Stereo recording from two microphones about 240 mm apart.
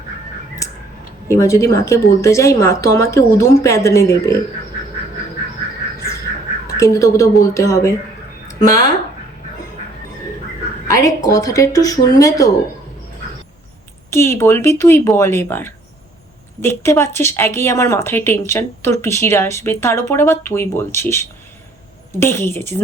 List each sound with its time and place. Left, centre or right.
0.6 s a sound: centre
1.3 s speech: centre
6.7 s speech: centre
10.8 s speech: centre
14.1 s speech: centre